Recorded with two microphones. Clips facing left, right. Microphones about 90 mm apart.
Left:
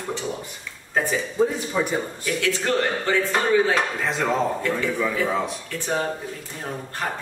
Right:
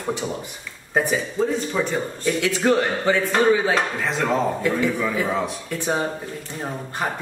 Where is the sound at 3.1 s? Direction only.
5° right (ahead or behind).